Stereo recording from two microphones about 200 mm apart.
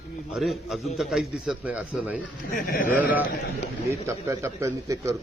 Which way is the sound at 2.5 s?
45° left (ahead or behind).